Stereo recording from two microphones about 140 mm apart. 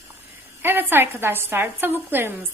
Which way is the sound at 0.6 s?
15° right (ahead or behind).